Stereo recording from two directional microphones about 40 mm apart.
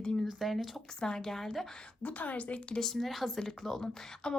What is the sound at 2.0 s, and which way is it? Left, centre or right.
Speech, left.